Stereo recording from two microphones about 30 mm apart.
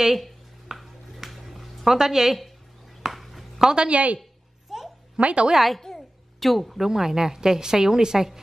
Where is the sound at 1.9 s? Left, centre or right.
Centre.